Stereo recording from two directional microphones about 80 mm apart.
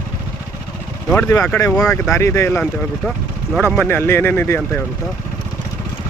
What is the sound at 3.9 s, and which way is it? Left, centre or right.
Speech, left.